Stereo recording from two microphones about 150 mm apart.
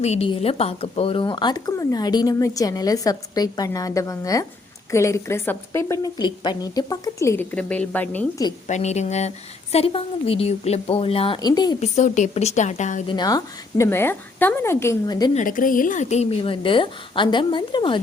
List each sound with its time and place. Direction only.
0.0 s a woman's voice: 45° left (ahead or behind); by 7.4 s 20° left (ahead or behind)
7.5 s a woman's voice: 10° left (ahead or behind)
8.6 s a woman's voice: 50° left (ahead or behind); by 11.8 s 25° left (ahead or behind)
11.8 s a woman's voice: 50° left (ahead or behind)
13.1 s a woman's voice: 25° left (ahead or behind)
15.4 s a woman's voice: 65° left (ahead or behind); by 18.0 s 30° left (ahead or behind)